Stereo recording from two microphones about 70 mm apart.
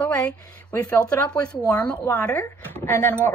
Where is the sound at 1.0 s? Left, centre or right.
Centre.